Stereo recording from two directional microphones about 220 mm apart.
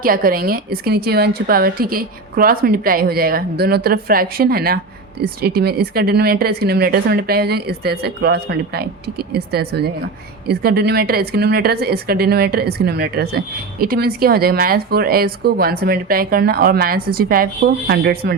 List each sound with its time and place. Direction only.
0.0 s a woman's voice: 40° right (ahead or behind)